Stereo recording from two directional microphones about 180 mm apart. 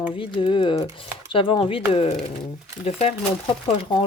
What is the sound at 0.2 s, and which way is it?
Speech, 30° left (ahead or behind).